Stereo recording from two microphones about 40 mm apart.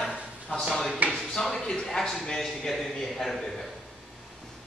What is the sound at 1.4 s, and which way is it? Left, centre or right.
A man's voice, centre.